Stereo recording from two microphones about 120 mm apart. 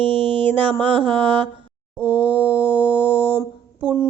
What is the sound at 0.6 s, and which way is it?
Mantra, 45° right (ahead or behind).